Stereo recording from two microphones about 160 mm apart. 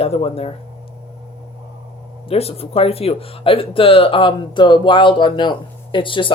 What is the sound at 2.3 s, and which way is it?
Speech, 40° left (ahead or behind).